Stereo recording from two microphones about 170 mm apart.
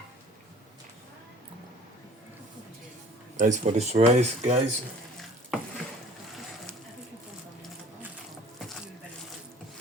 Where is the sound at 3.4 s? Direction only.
45° right (ahead or behind).